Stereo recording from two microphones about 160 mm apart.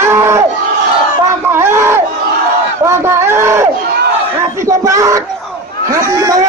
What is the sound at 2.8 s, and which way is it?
Speech, 15° right (ahead or behind).